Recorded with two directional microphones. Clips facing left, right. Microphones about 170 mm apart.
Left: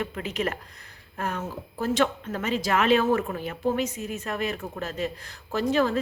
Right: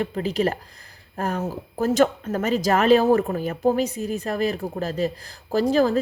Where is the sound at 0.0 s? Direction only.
35° right (ahead or behind).